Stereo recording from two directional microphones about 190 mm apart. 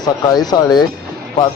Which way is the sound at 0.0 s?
20° left (ahead or behind).